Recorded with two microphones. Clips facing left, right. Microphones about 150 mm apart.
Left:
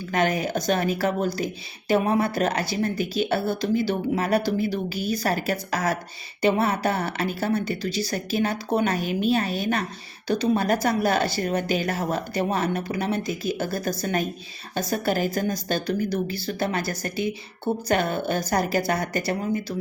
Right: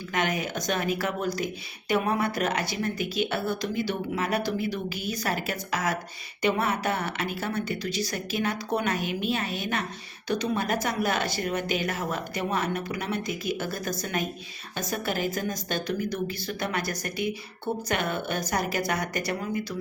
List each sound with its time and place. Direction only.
0.1 s a woman's voice: 35° left (ahead or behind)